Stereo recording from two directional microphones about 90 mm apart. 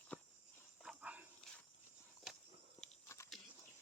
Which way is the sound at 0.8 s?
5° right (ahead or behind).